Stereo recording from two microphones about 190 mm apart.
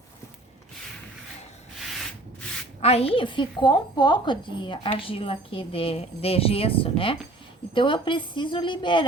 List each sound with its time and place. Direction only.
2.8 s speech: 30° left (ahead or behind)